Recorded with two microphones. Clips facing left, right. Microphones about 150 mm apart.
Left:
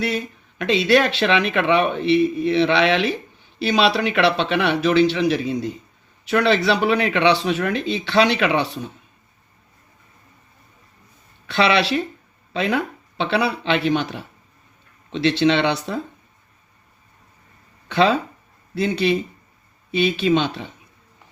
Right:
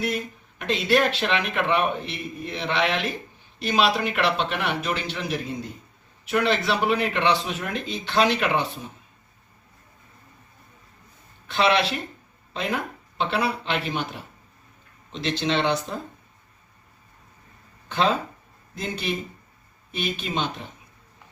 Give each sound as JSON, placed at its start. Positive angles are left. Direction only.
{"t": 0.6, "sound": "a man's voice", "side_deg": 90}
{"t": 11.4, "sound": "a man's voice", "side_deg": 85}
{"t": 12.5, "sound": "a man's voice", "side_deg": 90}
{"t": 15.1, "sound": "speech", "side_deg": 70}
{"t": 17.8, "sound": "a man's voice", "side_deg": 75}